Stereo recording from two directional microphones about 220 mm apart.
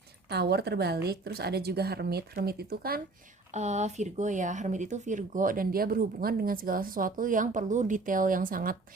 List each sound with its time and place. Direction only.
0.3 s speech: 50° right (ahead or behind)
3.5 s speech: 30° right (ahead or behind)